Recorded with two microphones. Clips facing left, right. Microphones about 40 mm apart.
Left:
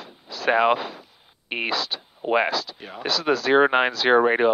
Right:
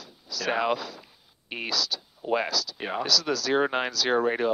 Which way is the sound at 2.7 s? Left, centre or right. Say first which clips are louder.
Right 7 dB; right.